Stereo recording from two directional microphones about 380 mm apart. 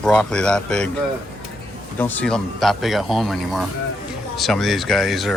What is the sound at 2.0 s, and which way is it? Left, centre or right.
Speech, centre.